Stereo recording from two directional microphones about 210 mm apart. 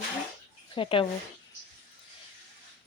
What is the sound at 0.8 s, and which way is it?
Speech, 25° left (ahead or behind).